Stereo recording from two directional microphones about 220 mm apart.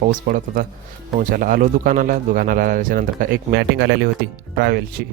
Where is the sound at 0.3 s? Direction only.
40° right (ahead or behind).